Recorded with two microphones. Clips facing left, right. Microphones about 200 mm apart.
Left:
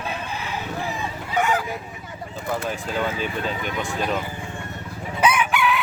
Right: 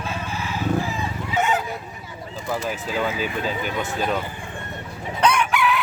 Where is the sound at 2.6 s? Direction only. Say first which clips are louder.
Right 2 dB; 5° right (ahead or behind).